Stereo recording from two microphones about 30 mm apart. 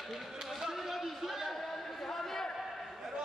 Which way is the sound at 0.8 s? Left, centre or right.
Centre.